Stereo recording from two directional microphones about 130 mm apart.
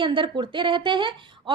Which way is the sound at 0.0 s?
40° right (ahead or behind).